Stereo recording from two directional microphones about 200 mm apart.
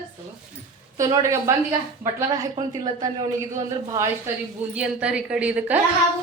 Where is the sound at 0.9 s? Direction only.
15° right (ahead or behind).